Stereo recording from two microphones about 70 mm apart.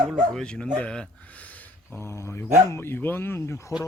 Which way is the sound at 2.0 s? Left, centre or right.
Left.